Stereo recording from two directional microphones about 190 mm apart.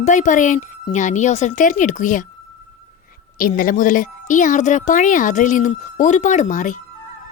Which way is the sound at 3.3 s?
50° left (ahead or behind).